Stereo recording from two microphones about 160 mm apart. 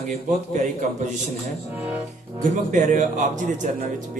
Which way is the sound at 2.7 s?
50° right (ahead or behind).